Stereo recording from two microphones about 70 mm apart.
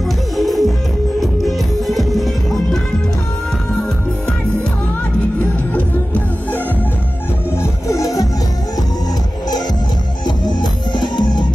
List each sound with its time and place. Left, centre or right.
0.4 s music: centre
7.9 s music: left
10.2 s music: left